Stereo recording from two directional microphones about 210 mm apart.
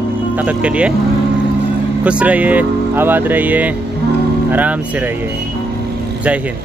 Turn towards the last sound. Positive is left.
turn(degrees=-10)  # may be behind; listen again after turning